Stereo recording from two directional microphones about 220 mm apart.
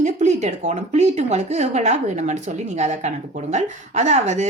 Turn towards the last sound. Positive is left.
turn(degrees=-30)  # may be behind; listen again after turning